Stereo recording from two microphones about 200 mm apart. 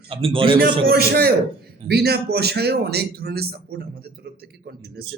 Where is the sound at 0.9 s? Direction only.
50° right (ahead or behind).